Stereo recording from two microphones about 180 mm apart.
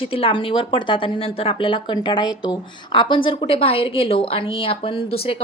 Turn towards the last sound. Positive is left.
turn(degrees=30)  # may be behind; listen again after turning